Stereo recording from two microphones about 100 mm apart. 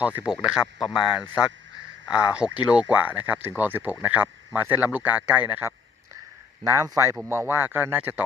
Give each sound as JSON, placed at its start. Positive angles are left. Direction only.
{"t": 0.0, "sound": "speech", "side_deg": -15}
{"t": 6.7, "sound": "speech", "side_deg": -30}